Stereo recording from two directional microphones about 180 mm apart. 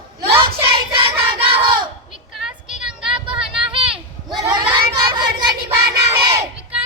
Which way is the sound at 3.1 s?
30° right (ahead or behind).